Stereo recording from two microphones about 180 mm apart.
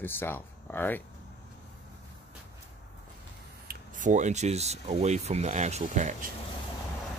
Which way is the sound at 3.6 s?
45° right (ahead or behind).